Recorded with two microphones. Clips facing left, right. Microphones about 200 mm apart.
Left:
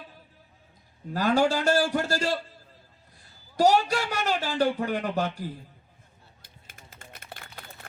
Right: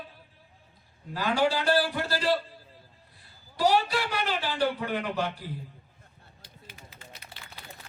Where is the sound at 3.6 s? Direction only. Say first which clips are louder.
Left 3 dB; 45° left (ahead or behind).